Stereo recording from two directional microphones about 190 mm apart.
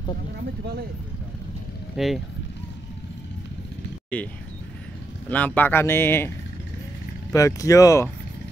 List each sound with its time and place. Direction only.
2.0 s speech: centre (ahead or behind)
4.1 s speech: 5° left (ahead or behind)
5.3 s speech: 10° left (ahead or behind)
7.3 s speech: 15° left (ahead or behind)